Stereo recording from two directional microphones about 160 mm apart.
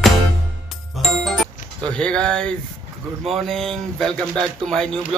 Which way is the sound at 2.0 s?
5° left (ahead or behind).